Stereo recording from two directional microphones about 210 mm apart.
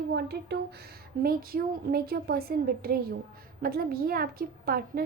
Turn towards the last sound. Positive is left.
turn(degrees=-45)  # may be behind; listen again after turning